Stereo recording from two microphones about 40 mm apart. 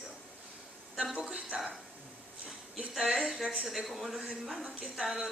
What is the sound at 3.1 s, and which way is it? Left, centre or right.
A man's voice, centre.